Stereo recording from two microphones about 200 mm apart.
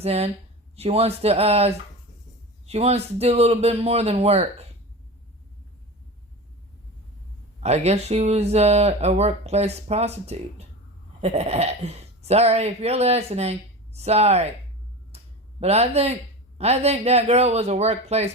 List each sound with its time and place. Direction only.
0.0 s speech: 30° right (ahead or behind)
7.6 s speech: 30° right (ahead or behind)
15.1 s a sound: 30° right (ahead or behind)
15.6 s speech: 30° right (ahead or behind)